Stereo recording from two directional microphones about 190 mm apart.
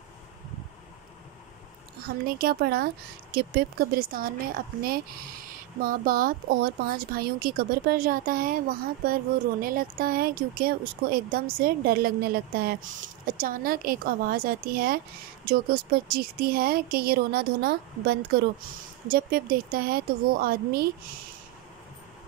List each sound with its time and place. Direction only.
2.0 s speech: 50° right (ahead or behind)